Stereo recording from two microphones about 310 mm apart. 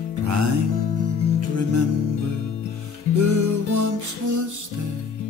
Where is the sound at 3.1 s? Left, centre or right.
Right.